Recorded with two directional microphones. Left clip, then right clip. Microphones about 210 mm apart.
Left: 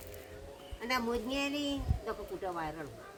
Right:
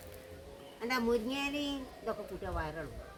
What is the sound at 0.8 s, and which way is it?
Speech, 10° left (ahead or behind).